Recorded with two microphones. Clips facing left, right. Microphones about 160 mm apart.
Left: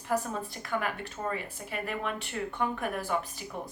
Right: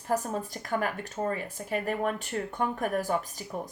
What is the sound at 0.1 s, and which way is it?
Speech, 45° right (ahead or behind).